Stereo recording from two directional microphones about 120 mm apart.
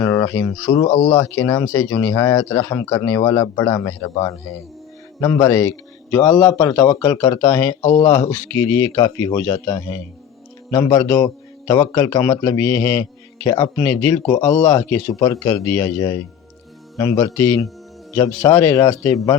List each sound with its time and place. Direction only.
0.0 s speech: 25° left (ahead or behind)
0.8 s speech: 55° left (ahead or behind)
1.1 s speech: 25° left (ahead or behind)
5.2 s speech: 20° left (ahead or behind)
7.5 s speech: 20° left (ahead or behind)
7.8 s speech: 45° left (ahead or behind)
8.6 s a man's voice: 20° left (ahead or behind)
13.7 s speech: 15° left (ahead or behind)
14.3 s speech: 30° left (ahead or behind)
14.8 s speech: 15° left (ahead or behind)
18.6 s speech: 25° left (ahead or behind)